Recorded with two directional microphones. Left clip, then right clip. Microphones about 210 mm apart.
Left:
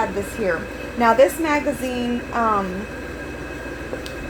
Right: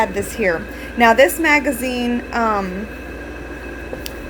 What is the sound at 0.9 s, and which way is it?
A woman's voice, 25° right (ahead or behind).